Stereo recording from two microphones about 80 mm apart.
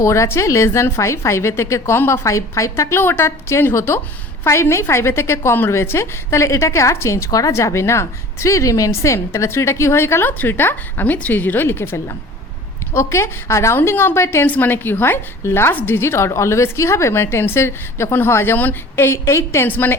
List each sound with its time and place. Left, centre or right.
0.0 s a woman's voice: left
3.0 s a woman's voice: left